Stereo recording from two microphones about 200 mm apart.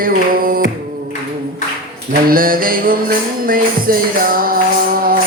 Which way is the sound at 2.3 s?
45° right (ahead or behind).